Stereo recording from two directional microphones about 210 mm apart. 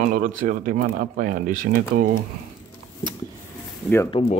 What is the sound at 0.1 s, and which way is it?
Speech, 40° right (ahead or behind).